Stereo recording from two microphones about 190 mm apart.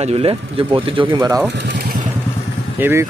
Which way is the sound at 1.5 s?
65° right (ahead or behind).